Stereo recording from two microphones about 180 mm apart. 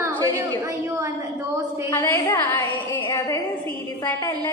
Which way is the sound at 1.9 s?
15° left (ahead or behind).